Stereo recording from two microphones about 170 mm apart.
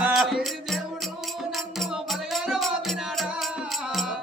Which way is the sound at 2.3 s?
Centre (ahead or behind).